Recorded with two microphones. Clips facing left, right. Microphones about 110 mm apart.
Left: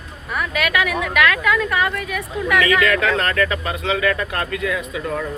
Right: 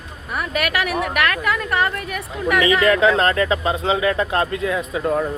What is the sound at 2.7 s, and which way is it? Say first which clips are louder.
Speech: right 2 dB; 25° right (ahead or behind).